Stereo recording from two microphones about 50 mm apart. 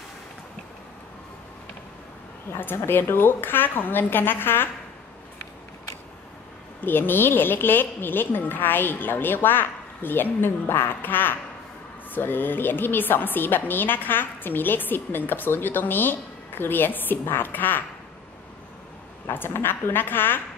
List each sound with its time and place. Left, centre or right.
2.5 s a woman's voice: left
6.8 s a woman's voice: left
19.3 s a woman's voice: left